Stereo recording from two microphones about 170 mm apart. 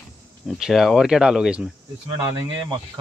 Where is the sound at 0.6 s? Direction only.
Centre (ahead or behind).